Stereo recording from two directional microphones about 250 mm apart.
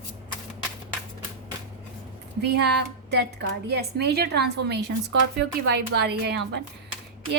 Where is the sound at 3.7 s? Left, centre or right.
Right.